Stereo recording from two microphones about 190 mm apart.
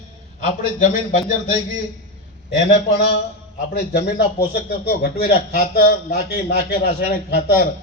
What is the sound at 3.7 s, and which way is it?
A man's voice, 60° left (ahead or behind).